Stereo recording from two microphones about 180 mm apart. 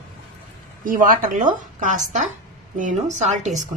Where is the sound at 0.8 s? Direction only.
50° right (ahead or behind).